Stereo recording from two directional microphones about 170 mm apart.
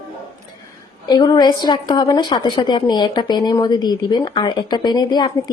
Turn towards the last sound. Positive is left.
turn(degrees=25)  # may be behind; listen again after turning